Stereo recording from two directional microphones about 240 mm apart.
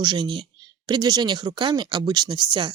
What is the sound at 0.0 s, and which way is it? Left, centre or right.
Speech, centre.